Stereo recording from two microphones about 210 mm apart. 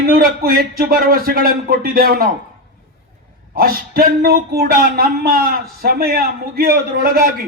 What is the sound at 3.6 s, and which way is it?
Speech, 45° right (ahead or behind).